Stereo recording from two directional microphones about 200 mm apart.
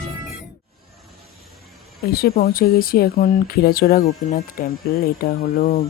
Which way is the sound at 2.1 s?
50° left (ahead or behind).